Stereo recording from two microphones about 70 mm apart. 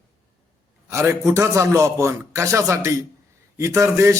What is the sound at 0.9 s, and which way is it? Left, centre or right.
A man's voice, right.